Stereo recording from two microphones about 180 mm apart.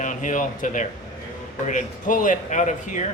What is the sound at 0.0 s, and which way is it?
Speech, 45° left (ahead or behind).